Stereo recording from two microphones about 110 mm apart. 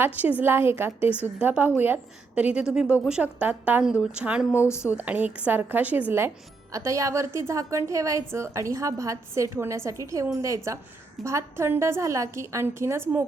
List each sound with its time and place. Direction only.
0.0 s a woman's voice: 15° right (ahead or behind)
4.5 s speech: 25° left (ahead or behind)
4.9 s a woman's voice: 15° right (ahead or behind)
6.7 s a woman's voice: 30° right (ahead or behind)